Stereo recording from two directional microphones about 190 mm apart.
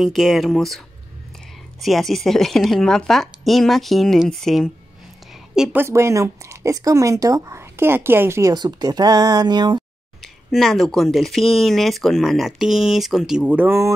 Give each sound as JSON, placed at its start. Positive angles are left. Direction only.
{"t": 0.0, "sound": "a woman's voice", "side_deg": 0}
{"t": 10.2, "sound": "speech", "side_deg": 0}